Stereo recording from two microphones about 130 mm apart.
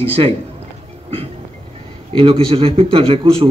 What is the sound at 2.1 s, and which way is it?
A man's voice, 45° right (ahead or behind).